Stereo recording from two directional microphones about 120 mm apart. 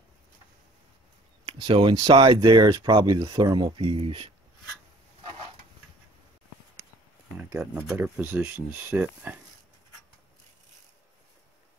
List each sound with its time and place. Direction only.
1.6 s speech: 45° right (ahead or behind)
7.9 s speech: 15° right (ahead or behind)